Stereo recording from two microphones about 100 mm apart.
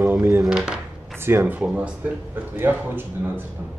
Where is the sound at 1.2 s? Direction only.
25° right (ahead or behind).